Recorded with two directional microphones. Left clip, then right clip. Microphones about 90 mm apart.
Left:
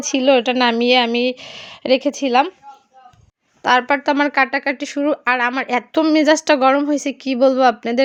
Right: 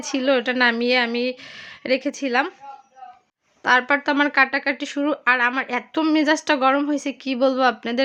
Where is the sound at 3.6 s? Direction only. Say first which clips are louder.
Left 3 dB; 45° left (ahead or behind).